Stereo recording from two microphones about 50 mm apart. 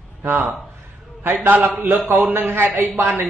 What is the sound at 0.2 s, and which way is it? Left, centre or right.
A man's voice, right.